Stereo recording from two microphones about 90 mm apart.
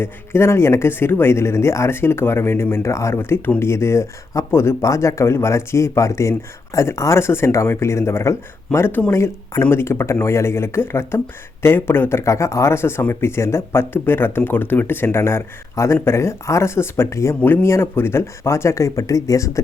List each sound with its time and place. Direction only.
0.0 s speech: 30° left (ahead or behind)